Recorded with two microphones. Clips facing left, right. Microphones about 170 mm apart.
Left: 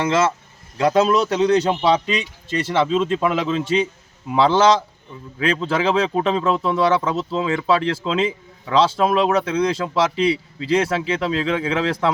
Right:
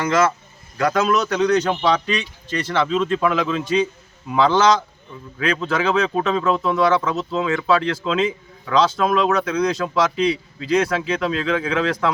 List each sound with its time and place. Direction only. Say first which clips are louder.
0.0 s a man's voice: even; 25° left (ahead or behind)